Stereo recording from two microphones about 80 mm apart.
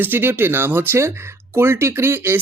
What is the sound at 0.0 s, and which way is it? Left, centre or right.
Speech, right.